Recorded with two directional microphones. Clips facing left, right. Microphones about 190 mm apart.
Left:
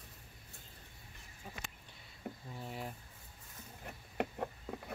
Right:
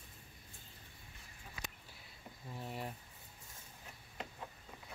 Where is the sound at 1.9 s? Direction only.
Centre (ahead or behind).